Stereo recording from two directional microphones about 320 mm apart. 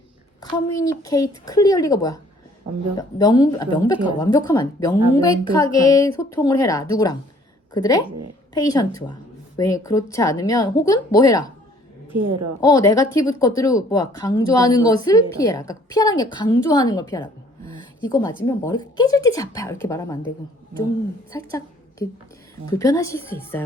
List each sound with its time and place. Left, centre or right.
1.0 s speech: centre
12.2 s a woman's voice: right
12.6 s speech: centre
21.3 s a woman's voice: centre